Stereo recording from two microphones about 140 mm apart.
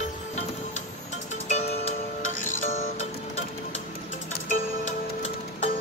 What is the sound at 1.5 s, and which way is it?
Music, 55° left (ahead or behind).